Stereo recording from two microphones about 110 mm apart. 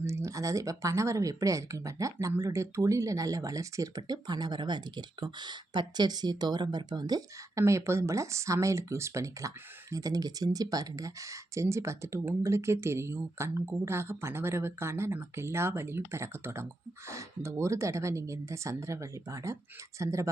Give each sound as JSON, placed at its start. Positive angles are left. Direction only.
{"t": 0.0, "sound": "speech", "side_deg": -25}